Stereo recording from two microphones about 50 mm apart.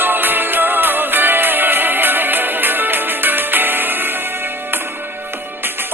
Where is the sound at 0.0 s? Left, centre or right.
Right.